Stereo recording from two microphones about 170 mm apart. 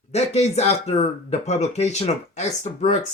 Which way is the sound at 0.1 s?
40° left (ahead or behind).